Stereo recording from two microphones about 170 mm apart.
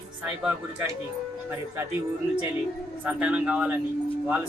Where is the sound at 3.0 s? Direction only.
5° right (ahead or behind).